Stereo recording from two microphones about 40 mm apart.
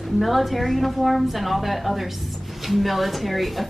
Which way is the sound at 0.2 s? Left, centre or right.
Centre.